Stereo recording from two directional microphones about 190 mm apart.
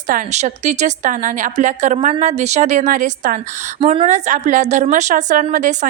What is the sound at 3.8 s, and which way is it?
Speech, 35° right (ahead or behind).